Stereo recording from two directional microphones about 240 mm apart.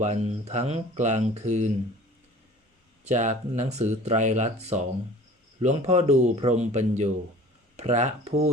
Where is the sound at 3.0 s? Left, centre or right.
Right.